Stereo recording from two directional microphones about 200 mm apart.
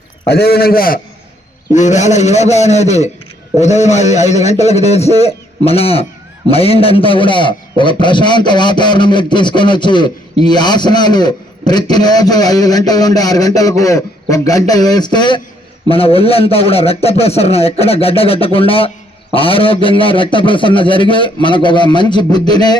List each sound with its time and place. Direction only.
0.3 s a man's voice: 50° left (ahead or behind)
1.7 s a man's voice: 35° left (ahead or behind); by 22.8 s 20° left (ahead or behind)